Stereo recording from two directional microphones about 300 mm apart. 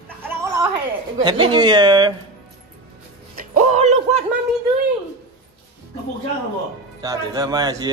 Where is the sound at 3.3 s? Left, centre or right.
Right.